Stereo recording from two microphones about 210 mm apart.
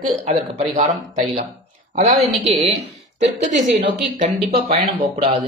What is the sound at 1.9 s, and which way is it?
Speech, 30° right (ahead or behind).